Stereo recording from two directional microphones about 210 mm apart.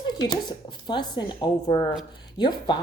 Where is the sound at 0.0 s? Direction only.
20° left (ahead or behind).